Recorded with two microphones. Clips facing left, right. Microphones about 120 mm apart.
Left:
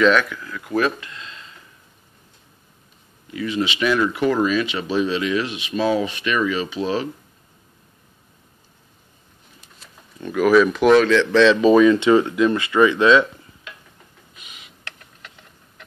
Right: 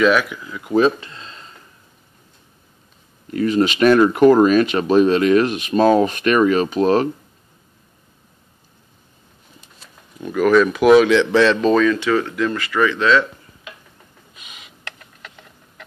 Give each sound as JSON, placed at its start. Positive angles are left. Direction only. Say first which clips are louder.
{"t": 0.0, "sound": "speech", "louder": "right 1 dB", "side_deg": -10}
{"t": 3.3, "sound": "speech", "louder": "right 6 dB", "side_deg": -45}
{"t": 10.2, "sound": "speech", "louder": "right 1 dB", "side_deg": 0}
{"t": 11.7, "sound": "speech", "louder": "left 3 dB", "side_deg": 20}
{"t": 14.5, "sound": "a sound", "louder": "right 4 dB", "side_deg": -90}